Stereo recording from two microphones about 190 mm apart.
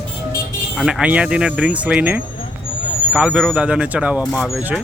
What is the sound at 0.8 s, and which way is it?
A man's voice, 5° right (ahead or behind).